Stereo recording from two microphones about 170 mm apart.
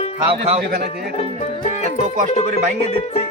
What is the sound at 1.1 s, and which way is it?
Speech, 40° left (ahead or behind).